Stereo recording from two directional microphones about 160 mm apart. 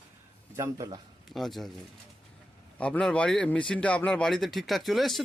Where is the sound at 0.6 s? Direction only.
25° right (ahead or behind).